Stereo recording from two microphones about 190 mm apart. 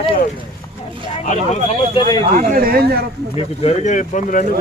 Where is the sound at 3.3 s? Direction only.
35° left (ahead or behind).